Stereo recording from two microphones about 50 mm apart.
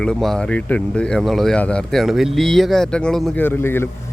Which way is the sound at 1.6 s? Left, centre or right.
Left.